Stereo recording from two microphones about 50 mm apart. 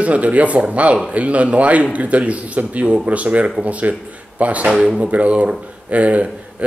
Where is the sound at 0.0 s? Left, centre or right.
Right.